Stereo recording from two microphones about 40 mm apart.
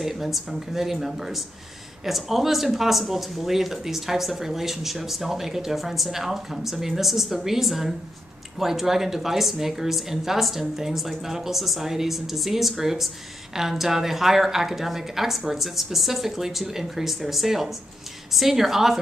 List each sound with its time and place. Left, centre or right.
0.0 s a woman's voice: centre